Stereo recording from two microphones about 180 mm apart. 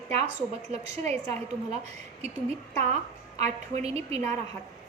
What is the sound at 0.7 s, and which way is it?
Speech, 35° right (ahead or behind).